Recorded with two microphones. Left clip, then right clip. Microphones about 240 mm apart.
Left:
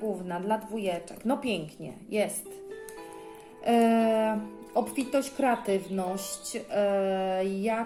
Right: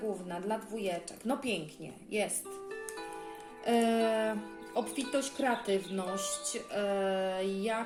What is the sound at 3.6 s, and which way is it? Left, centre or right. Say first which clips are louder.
Speech: left 5 dB; centre.